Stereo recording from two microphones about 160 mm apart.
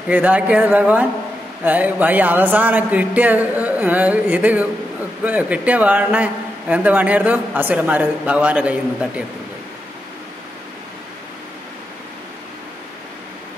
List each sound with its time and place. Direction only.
0.1 s a man's voice: 10° right (ahead or behind)